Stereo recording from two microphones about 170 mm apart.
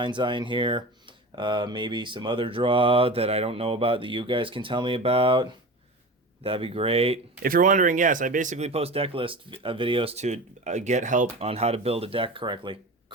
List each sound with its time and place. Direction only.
0.0 s speech: 25° right (ahead or behind)
7.4 s speech: 50° right (ahead or behind); by 13.1 s 30° right (ahead or behind)